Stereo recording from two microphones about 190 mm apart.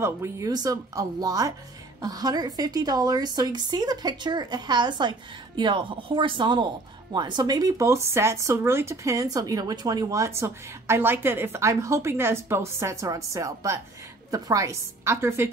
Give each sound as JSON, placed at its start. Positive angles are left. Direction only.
{"t": 0.0, "sound": "a woman's voice", "side_deg": -15}